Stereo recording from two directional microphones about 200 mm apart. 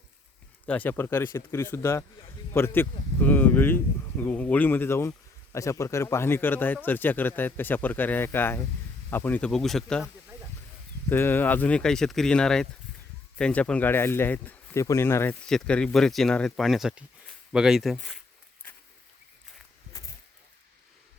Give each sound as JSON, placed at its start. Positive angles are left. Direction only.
{"t": 0.6, "sound": "speech", "side_deg": 10}
{"t": 11.1, "sound": "speech", "side_deg": 10}
{"t": 19.9, "sound": "a sound", "side_deg": 15}